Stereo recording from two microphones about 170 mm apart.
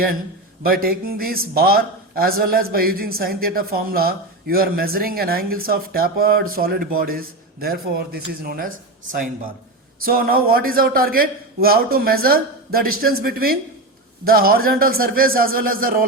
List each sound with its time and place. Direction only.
0.7 s a man's voice: 60° right (ahead or behind)